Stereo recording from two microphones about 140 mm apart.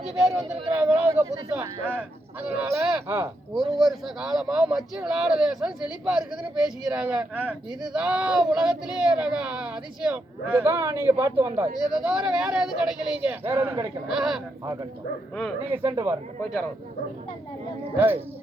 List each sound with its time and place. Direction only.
0.8 s speech: 10° right (ahead or behind)
3.5 s speech: 5° right (ahead or behind)
14.1 s speech: 5° right (ahead or behind)
14.6 s speech: 25° right (ahead or behind)
15.9 s speech: 25° right (ahead or behind)
17.9 s speech: 15° right (ahead or behind)